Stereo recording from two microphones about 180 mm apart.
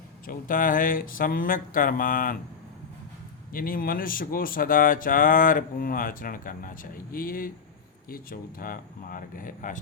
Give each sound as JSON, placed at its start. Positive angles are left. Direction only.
{"t": 0.3, "sound": "speech", "side_deg": 50}
{"t": 3.5, "sound": "speech", "side_deg": 50}